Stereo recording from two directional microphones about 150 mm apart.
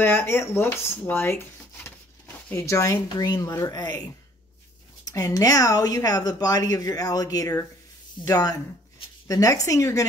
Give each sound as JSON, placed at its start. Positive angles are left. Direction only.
{"t": 0.0, "sound": "speech", "side_deg": 15}
{"t": 5.1, "sound": "a woman's voice", "side_deg": 25}